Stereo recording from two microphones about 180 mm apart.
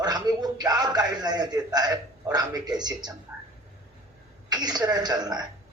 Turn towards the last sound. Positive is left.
turn(degrees=-20)  # may be behind; listen again after turning